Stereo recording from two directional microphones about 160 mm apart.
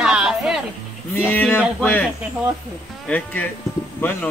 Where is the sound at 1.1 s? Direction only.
10° left (ahead or behind).